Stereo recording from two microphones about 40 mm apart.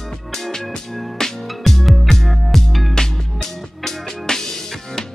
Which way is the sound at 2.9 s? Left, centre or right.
Centre.